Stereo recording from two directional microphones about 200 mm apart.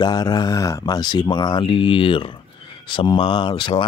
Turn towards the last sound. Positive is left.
turn(degrees=25)  # may be behind; listen again after turning